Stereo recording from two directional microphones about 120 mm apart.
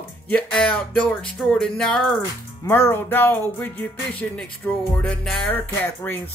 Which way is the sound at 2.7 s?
20° left (ahead or behind).